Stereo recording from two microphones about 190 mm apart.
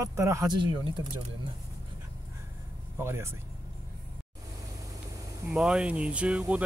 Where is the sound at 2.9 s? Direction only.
15° right (ahead or behind).